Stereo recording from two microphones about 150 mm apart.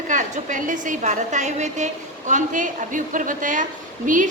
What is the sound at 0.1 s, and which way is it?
A woman's voice, 55° right (ahead or behind).